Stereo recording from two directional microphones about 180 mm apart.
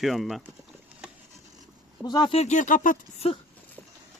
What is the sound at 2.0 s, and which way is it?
Speech, 25° left (ahead or behind).